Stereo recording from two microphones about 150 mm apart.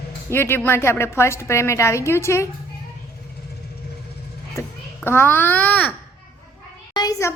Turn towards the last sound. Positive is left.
turn(degrees=20)  # may be behind; listen again after turning